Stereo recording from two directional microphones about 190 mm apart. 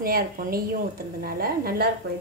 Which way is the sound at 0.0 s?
50° right (ahead or behind).